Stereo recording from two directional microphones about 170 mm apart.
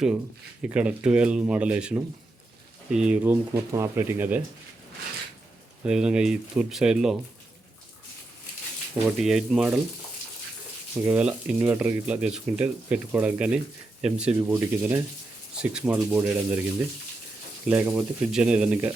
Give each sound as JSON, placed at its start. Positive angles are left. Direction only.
{"t": 0.6, "sound": "speech", "side_deg": -5}
{"t": 5.8, "sound": "speech", "side_deg": -5}
{"t": 9.0, "sound": "speech", "side_deg": -5}
{"t": 11.0, "sound": "speech", "side_deg": -5}
{"t": 17.7, "sound": "speech", "side_deg": -10}